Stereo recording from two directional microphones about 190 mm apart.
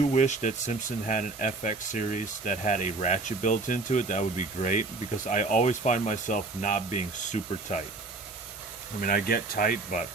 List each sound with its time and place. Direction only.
0.1 s speech: 40° left (ahead or behind)
9.0 s speech: 45° left (ahead or behind)